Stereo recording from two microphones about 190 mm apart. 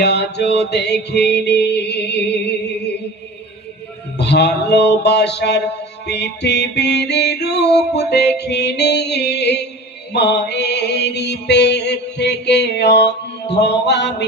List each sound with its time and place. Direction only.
0.0 s music: 65° left (ahead or behind)
4.2 s music: 65° left (ahead or behind)